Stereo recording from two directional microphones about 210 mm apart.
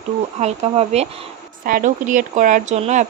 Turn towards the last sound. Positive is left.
turn(degrees=-35)  # may be behind; listen again after turning